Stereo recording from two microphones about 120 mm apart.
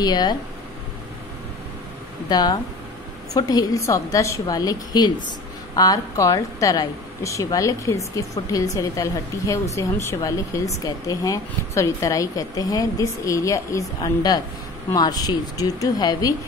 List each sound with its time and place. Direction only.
0.0 s a woman's voice: 35° left (ahead or behind)
2.2 s a woman's voice: 35° left (ahead or behind)